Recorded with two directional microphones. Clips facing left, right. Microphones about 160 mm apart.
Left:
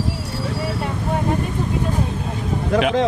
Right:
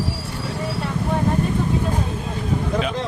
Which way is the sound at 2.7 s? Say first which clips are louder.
Left 10 dB; 75° left (ahead or behind).